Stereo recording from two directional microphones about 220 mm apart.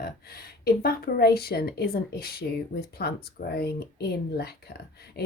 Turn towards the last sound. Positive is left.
turn(degrees=45)  # may be behind; listen again after turning